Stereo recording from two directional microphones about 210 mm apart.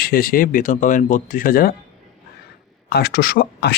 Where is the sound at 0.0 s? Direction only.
45° left (ahead or behind).